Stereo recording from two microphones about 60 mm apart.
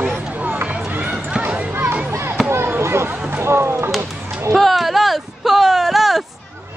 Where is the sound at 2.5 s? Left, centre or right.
Right.